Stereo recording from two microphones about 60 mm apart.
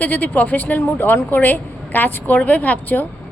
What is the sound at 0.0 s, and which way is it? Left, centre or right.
A woman's voice, left.